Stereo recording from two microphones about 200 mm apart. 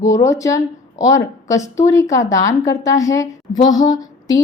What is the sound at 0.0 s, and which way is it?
A woman's voice, 15° left (ahead or behind).